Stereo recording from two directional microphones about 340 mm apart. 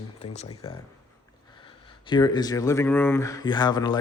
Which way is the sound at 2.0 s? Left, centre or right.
Centre.